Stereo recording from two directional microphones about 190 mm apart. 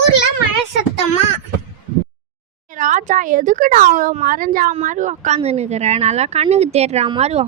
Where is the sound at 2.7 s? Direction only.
40° right (ahead or behind).